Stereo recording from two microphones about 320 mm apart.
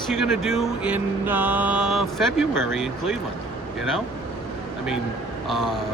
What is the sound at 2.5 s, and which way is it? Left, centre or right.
Speech, left.